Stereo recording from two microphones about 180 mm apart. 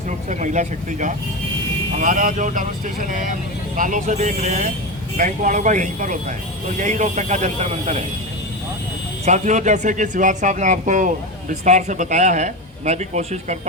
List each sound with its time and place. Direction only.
0.3 s speech: 40° right (ahead or behind)
9.2 s speech: 40° right (ahead or behind)